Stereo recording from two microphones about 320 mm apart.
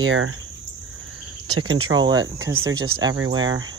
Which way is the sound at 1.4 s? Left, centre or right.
Right.